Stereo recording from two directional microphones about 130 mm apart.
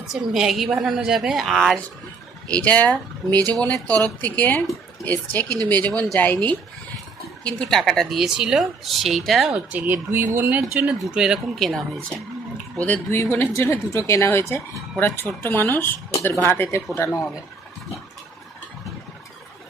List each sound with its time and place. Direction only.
0.0 s speech: centre (ahead or behind)
5.9 s speech: 25° right (ahead or behind)
6.1 s a woman's voice: 15° left (ahead or behind)